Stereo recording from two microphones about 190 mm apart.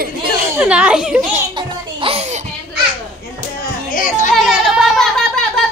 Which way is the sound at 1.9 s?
30° right (ahead or behind).